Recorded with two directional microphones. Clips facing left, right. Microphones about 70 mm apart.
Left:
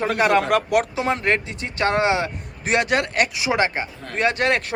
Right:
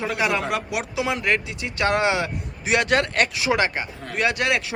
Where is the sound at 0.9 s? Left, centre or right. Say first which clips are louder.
Left 2 dB; left.